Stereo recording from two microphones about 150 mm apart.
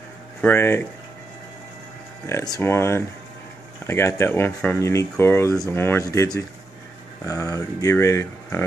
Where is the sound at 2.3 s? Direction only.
20° left (ahead or behind).